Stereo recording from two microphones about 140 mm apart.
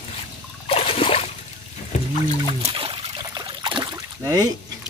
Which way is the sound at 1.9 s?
55° left (ahead or behind).